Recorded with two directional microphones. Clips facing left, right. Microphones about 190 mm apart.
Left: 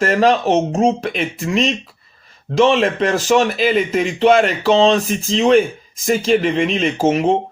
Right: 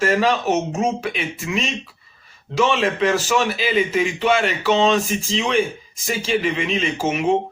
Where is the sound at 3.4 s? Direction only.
45° left (ahead or behind).